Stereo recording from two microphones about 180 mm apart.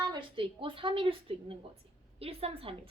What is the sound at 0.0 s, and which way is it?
Speech, 25° right (ahead or behind).